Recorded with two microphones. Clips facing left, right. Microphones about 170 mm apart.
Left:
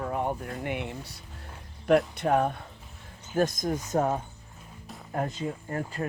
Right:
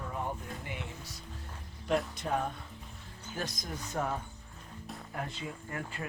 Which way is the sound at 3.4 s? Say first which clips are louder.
Left 13 dB; 50° left (ahead or behind).